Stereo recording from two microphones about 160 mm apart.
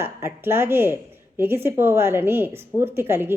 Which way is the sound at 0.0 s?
15° right (ahead or behind).